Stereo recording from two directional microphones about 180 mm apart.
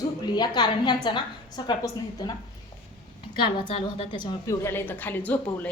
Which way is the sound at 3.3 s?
25° left (ahead or behind).